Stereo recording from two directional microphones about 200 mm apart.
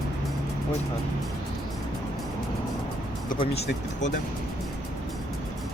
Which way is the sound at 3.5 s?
60° left (ahead or behind).